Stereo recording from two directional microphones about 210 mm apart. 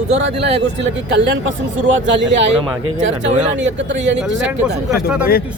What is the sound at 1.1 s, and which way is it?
Speech, 60° right (ahead or behind).